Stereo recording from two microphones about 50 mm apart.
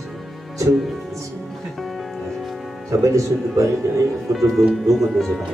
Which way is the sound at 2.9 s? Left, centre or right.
Right.